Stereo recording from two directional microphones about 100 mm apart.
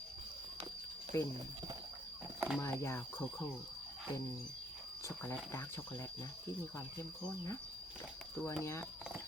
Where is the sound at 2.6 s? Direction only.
30° left (ahead or behind).